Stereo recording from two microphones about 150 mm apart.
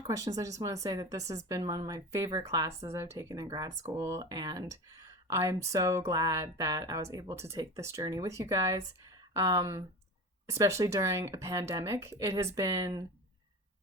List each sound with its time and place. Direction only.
0.1 s speech: 25° right (ahead or behind)